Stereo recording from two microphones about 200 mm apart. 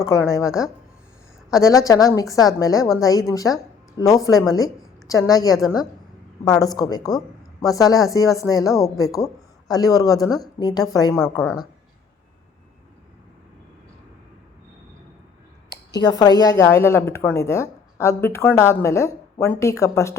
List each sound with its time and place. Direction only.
0.0 s speech: 15° left (ahead or behind)
1.6 s a woman's voice: 15° left (ahead or behind)
15.7 s speech: 20° left (ahead or behind)